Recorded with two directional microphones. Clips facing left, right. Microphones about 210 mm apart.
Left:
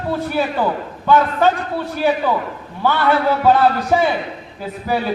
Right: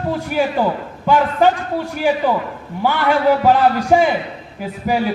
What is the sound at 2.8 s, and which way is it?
A man's voice, 15° right (ahead or behind).